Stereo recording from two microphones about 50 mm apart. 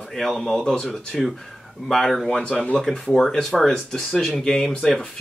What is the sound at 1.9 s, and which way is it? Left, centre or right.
Speech, centre.